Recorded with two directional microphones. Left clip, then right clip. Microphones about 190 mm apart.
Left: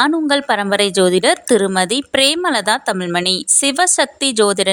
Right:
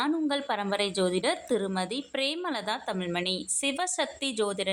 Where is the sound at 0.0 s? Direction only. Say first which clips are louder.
Left 14 dB; 50° left (ahead or behind).